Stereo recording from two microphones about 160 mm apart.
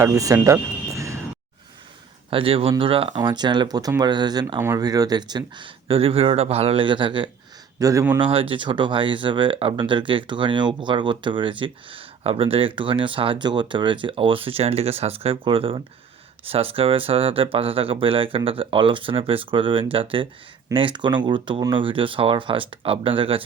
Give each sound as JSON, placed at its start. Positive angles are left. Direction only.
{"t": 0.0, "sound": "speech", "side_deg": -20}
{"t": 2.3, "sound": "speech", "side_deg": -35}
{"t": 7.8, "sound": "a man's voice", "side_deg": -20}
{"t": 8.2, "sound": "speech", "side_deg": -35}